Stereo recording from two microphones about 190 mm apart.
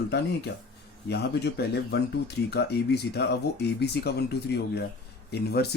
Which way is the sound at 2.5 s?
60° left (ahead or behind).